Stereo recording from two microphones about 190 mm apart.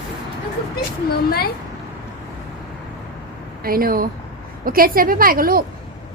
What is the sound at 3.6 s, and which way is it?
A woman's voice, 50° right (ahead or behind).